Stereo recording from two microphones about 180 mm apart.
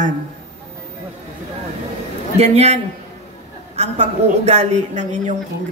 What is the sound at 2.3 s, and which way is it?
A woman's voice, 35° right (ahead or behind).